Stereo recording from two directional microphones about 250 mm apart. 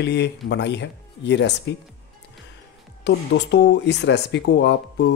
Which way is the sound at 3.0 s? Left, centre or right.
Left.